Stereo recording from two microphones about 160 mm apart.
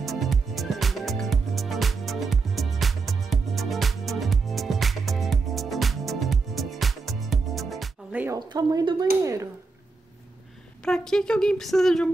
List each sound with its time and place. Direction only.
0.0 s music: centre (ahead or behind)
8.1 s music: 10° right (ahead or behind)
8.4 s speech: 25° right (ahead or behind)
10.8 s speech: 5° left (ahead or behind)